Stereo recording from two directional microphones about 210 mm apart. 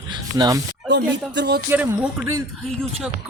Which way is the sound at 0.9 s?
55° right (ahead or behind).